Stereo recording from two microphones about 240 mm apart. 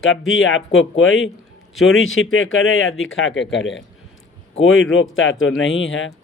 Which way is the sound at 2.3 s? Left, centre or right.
Left.